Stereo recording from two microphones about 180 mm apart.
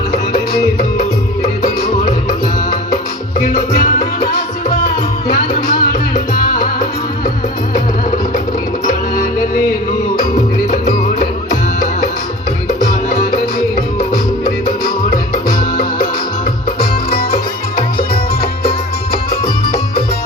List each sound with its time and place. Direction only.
5.3 s music: 50° left (ahead or behind)
10.7 s music: 40° left (ahead or behind)
12.6 s music: 35° left (ahead or behind)
15.1 s music: 55° left (ahead or behind)